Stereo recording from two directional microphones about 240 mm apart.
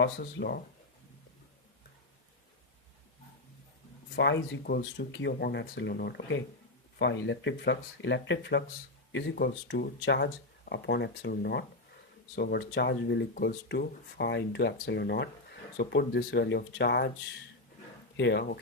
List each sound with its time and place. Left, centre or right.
0.0 s speech: left
4.1 s speech: left
18.2 s speech: left